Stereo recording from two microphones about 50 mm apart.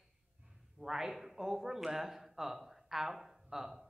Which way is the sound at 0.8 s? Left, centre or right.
Centre.